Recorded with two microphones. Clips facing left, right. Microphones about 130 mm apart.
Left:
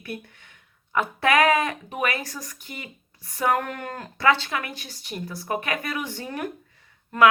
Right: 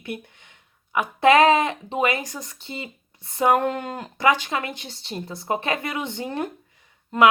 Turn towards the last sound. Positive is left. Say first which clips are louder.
# right 1 dB
turn(degrees=-20)  # may be behind; listen again after turning